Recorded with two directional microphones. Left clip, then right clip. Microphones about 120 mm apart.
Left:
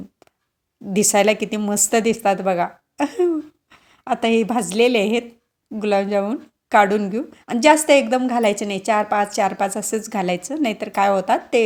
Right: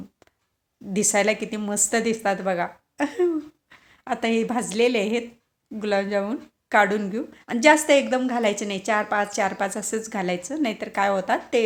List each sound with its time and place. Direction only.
0.9 s a woman's voice: 45° left (ahead or behind)